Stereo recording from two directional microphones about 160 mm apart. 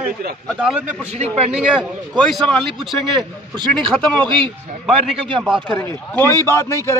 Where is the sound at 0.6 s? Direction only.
5° right (ahead or behind).